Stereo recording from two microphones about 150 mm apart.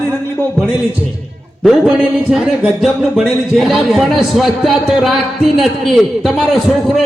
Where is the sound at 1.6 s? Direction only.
Centre (ahead or behind).